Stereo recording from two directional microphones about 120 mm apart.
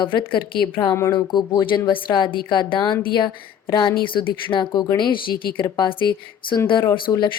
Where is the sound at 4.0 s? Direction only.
40° left (ahead or behind).